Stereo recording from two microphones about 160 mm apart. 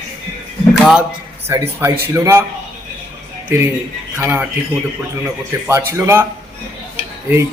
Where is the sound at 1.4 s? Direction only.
15° right (ahead or behind).